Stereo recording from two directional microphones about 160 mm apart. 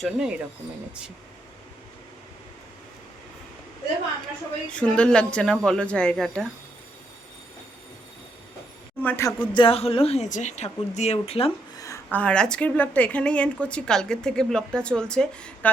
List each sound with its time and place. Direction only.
0.0 s speech: 5° right (ahead or behind)
4.7 s a woman's voice: 5° left (ahead or behind)
9.0 s a woman's voice: 15° left (ahead or behind)
9.6 s a woman's voice: 35° left (ahead or behind)
12.1 s a woman's voice: 5° left (ahead or behind)